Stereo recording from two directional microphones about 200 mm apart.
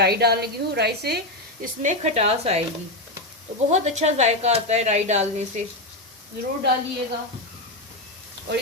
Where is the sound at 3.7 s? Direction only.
35° right (ahead or behind).